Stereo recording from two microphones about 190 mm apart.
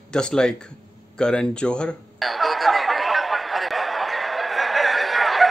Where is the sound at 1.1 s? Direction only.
5° left (ahead or behind).